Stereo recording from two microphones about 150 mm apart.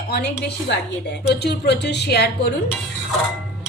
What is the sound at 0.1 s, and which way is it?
A woman's voice, 90° left.